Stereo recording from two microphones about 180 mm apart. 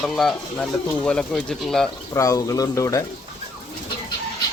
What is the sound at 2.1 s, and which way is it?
Speech, 20° left (ahead or behind).